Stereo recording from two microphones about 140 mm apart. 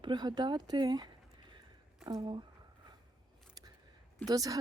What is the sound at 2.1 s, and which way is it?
Speech, 30° right (ahead or behind).